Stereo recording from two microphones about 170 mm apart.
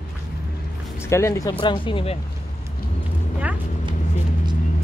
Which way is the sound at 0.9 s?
15° left (ahead or behind).